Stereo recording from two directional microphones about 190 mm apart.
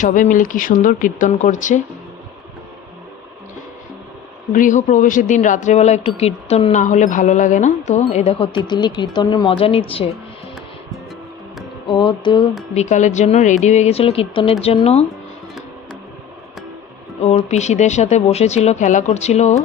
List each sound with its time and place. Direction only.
0.0 s speech: 40° left (ahead or behind)
4.5 s speech: 45° left (ahead or behind)
11.9 s speech: 25° left (ahead or behind)
12.7 s speech: 40° left (ahead or behind)
17.2 s speech: 35° left (ahead or behind)